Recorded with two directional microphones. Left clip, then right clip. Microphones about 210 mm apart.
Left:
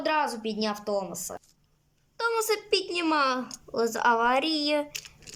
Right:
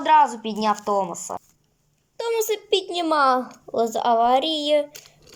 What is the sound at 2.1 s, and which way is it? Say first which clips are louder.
A woman's voice: right 3 dB; centre (ahead or behind).